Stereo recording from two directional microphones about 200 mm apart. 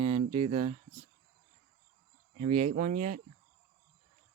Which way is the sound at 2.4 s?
35° right (ahead or behind).